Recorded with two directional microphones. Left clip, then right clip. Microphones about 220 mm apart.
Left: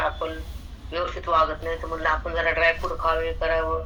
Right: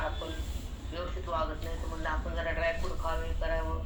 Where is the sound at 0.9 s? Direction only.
30° left (ahead or behind).